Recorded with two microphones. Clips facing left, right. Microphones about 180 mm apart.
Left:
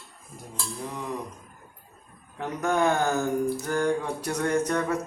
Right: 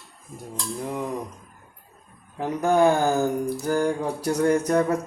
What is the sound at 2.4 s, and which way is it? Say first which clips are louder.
Mantra: right 5 dB; 35° right (ahead or behind).